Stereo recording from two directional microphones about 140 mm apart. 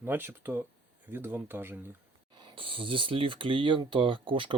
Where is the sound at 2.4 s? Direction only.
35° right (ahead or behind).